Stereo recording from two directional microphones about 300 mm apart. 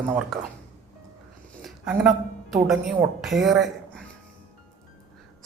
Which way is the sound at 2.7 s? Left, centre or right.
Centre.